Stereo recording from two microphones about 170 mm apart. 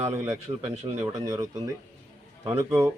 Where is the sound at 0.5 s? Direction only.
25° right (ahead or behind).